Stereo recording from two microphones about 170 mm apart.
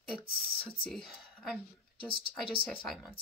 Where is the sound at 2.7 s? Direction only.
Centre (ahead or behind).